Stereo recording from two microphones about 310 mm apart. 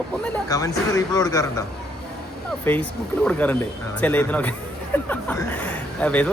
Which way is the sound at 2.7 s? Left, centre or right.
Centre.